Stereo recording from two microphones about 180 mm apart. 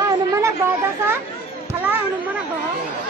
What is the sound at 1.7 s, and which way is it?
Children playing, 10° right (ahead or behind).